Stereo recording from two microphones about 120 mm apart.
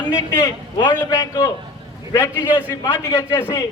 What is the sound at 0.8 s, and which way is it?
A man's voice, 35° left (ahead or behind).